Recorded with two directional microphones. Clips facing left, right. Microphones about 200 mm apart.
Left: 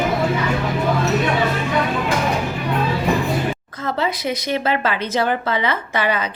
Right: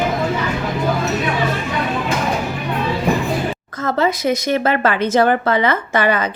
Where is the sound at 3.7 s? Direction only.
45° right (ahead or behind).